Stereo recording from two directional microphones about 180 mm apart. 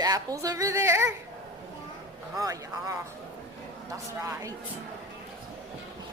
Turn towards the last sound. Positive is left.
turn(degrees=-20)  # may be behind; listen again after turning